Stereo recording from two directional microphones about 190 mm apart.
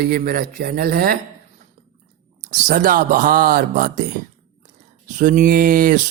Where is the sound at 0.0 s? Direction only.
55° right (ahead or behind).